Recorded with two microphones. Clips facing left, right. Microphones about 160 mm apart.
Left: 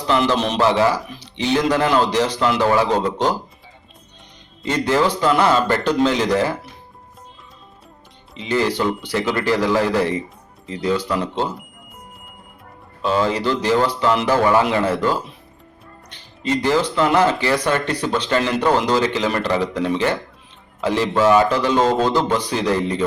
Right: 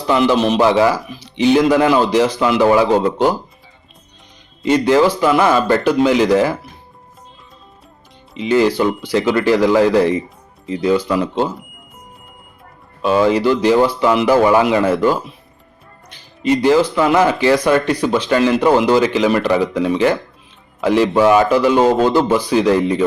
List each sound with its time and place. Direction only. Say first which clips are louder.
0.3 s a man's voice: right 4 dB; 5° right (ahead or behind)
4.6 s speech: right 6 dB; 15° right (ahead or behind)
8.4 s speech: right 6 dB; 15° right (ahead or behind)
13.0 s speech: right 6 dB; 15° right (ahead or behind)
16.4 s speech: right 6 dB; 15° right (ahead or behind)